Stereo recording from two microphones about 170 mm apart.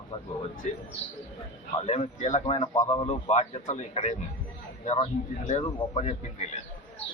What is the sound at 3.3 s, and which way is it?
A man's voice, 40° left (ahead or behind).